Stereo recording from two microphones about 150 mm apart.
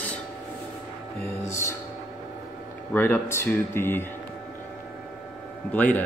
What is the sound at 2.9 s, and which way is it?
Speech, 15° left (ahead or behind).